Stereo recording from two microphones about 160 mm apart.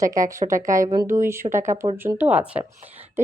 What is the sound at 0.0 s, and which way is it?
Speech, 20° right (ahead or behind).